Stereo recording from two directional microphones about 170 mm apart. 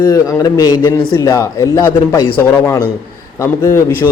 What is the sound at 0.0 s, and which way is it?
A man's voice, 20° left (ahead or behind).